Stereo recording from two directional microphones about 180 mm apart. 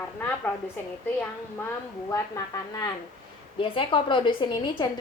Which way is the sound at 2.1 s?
20° left (ahead or behind).